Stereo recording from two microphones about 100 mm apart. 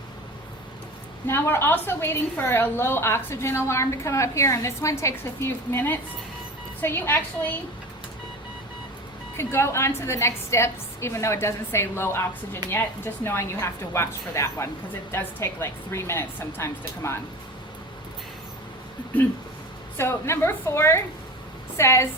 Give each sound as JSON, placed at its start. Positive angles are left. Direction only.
{"t": 1.3, "sound": "a woman's voice", "side_deg": 25}
{"t": 9.4, "sound": "a woman's voice", "side_deg": 25}
{"t": 13.2, "sound": "a woman's voice", "side_deg": 25}
{"t": 20.0, "sound": "a woman's voice", "side_deg": 25}